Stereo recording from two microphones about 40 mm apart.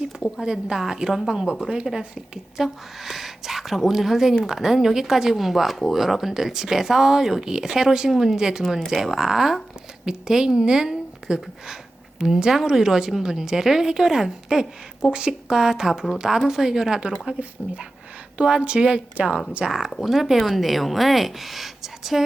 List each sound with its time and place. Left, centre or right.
0.4 s a woman's voice: centre
3.0 s a woman's voice: centre
15.1 s a woman's voice: right
17.4 s speech: right
18.3 s a woman's voice: right
19.6 s a woman's voice: centre
20.0 s speech: centre